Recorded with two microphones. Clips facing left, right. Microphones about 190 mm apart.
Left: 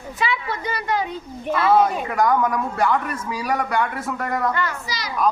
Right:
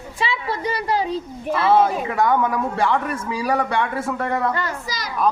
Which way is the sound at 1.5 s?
30° right (ahead or behind).